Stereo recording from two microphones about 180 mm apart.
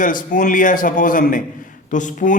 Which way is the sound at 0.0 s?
50° left (ahead or behind).